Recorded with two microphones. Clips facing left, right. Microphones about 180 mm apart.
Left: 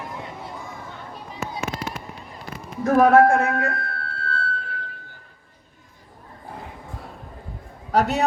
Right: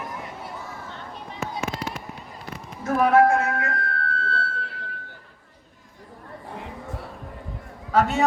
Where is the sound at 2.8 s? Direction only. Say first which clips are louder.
Left 3 dB; 45° left (ahead or behind).